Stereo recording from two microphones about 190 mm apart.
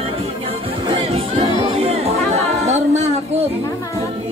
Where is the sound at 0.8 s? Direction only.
30° right (ahead or behind).